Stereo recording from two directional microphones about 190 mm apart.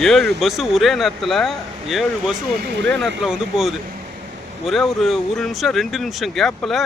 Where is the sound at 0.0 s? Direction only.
Centre (ahead or behind).